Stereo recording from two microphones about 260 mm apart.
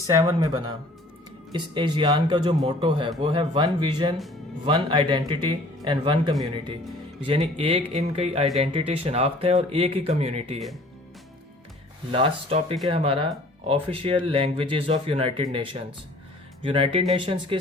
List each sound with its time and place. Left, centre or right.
0.1 s a man's voice: centre
12.1 s speech: right